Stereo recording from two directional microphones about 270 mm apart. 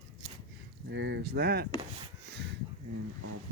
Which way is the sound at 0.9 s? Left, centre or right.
Right.